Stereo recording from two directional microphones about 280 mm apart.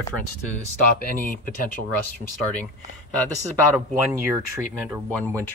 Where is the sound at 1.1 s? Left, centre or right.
Left.